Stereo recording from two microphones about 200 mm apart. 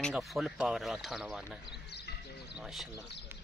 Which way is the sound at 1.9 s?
55° left (ahead or behind).